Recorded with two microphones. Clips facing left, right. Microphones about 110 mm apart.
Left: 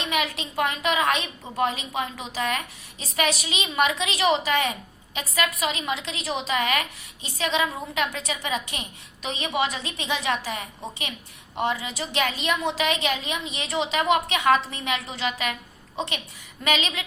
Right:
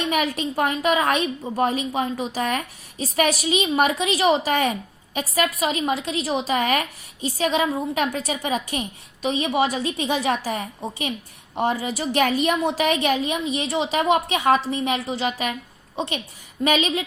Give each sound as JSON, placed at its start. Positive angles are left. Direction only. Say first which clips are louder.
{"t": 0.1, "sound": "a woman's voice", "louder": "right 4 dB", "side_deg": -45}